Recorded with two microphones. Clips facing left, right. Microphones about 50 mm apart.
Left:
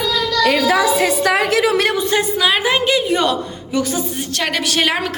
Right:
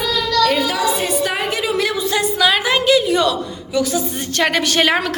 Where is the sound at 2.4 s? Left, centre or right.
Centre; by 3.3 s left.